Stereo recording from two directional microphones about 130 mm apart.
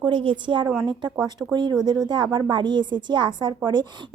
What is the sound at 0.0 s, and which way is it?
Speech, 40° right (ahead or behind).